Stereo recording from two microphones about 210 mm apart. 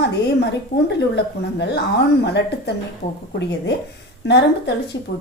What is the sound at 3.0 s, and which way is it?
Speech, 35° left (ahead or behind).